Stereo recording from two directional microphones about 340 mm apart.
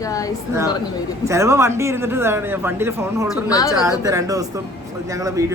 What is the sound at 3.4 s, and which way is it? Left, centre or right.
Speech, centre.